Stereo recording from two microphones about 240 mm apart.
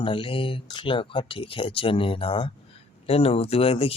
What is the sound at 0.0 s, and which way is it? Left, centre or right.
Speech, left.